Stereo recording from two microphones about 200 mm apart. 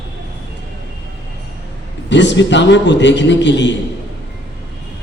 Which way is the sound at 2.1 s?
60° left (ahead or behind).